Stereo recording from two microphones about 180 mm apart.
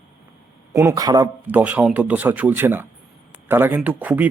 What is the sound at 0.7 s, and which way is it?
Speech, 15° right (ahead or behind).